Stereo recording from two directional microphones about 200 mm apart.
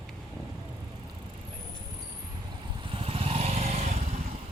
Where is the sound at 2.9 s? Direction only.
30° right (ahead or behind).